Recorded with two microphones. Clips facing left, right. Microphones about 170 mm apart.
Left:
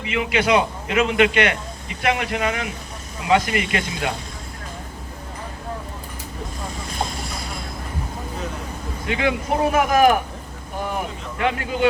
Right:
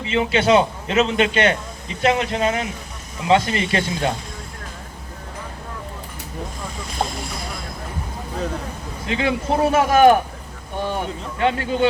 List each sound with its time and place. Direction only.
0.0 s a man's voice: 30° right (ahead or behind)
9.0 s a man's voice: 30° right (ahead or behind)